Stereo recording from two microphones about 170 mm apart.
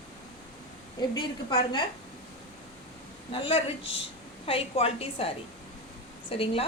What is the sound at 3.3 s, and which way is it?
A woman's voice, 35° left (ahead or behind).